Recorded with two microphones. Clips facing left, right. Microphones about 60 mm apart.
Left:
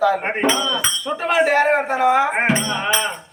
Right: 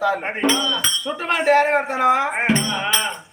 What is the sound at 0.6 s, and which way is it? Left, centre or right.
A man's voice, centre.